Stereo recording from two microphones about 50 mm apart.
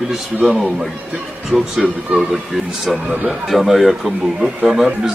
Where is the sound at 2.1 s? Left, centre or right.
Right.